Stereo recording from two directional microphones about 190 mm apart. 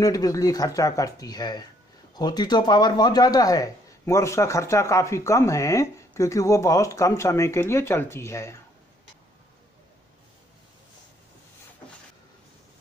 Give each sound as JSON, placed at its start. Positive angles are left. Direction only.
{"t": 0.0, "sound": "speech", "side_deg": 20}